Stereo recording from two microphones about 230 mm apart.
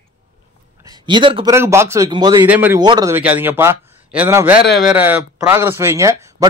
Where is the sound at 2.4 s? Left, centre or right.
Centre.